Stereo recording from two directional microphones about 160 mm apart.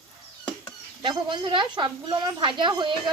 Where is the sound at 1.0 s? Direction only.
30° right (ahead or behind).